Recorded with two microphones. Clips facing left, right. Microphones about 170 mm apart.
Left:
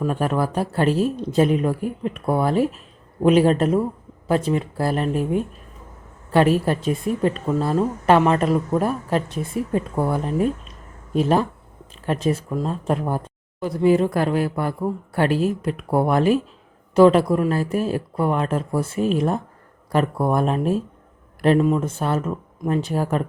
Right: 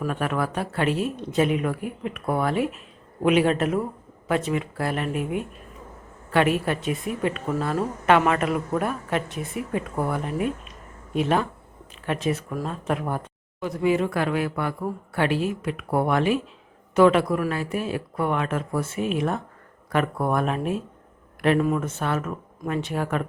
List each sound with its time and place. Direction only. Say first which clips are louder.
0.1 s speech: left 4 dB; 35° left (ahead or behind)